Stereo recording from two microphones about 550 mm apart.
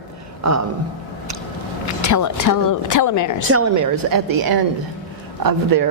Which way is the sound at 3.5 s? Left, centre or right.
Right.